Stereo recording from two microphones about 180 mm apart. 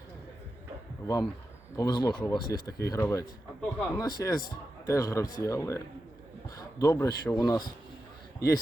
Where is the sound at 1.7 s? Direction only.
20° left (ahead or behind).